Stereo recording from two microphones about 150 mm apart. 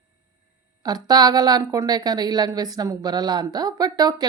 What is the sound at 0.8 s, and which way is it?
A woman's voice, 25° right (ahead or behind).